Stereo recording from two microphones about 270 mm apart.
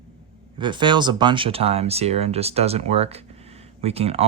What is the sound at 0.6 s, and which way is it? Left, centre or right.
Speech, centre.